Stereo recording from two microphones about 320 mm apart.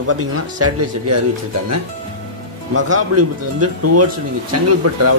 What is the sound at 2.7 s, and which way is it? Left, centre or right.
Speech, right.